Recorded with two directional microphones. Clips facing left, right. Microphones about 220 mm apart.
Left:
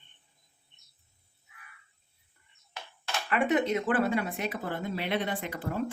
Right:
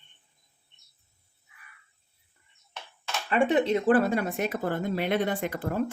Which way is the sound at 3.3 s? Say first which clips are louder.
Right 3 dB; 30° right (ahead or behind).